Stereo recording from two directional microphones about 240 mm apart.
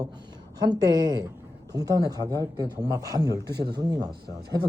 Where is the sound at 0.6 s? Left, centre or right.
Centre.